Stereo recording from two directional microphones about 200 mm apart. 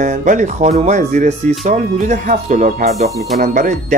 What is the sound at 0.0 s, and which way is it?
Speech, 40° right (ahead or behind).